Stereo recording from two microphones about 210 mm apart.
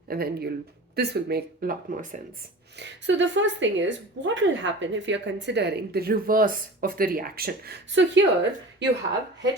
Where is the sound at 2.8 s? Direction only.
60° right (ahead or behind).